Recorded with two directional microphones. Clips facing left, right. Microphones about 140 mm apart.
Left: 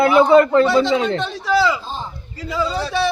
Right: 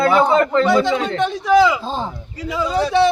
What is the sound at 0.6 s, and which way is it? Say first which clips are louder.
Speech: even; 15° right (ahead or behind).